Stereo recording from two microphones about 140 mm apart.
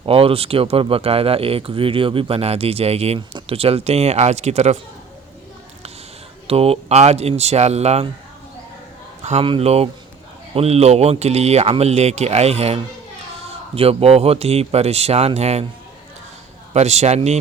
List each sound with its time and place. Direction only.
0.0 s speech: 40° right (ahead or behind)
6.5 s speech: 45° right (ahead or behind)
9.4 s speech: 40° right (ahead or behind)
16.7 s speech: 55° right (ahead or behind)